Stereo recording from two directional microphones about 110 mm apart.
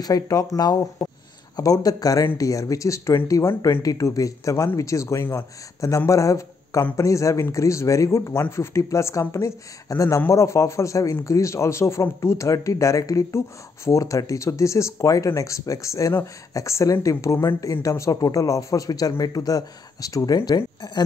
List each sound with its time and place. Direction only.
0.0 s a man's voice: 35° left (ahead or behind)